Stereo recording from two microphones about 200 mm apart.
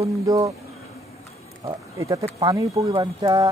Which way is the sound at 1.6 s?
15° right (ahead or behind).